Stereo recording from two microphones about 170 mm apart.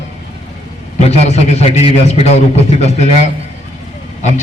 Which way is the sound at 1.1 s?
40° left (ahead or behind).